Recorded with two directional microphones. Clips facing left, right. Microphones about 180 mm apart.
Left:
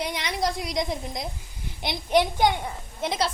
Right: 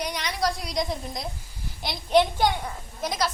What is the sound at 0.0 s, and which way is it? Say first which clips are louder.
A woman's voice: even; 20° left (ahead or behind).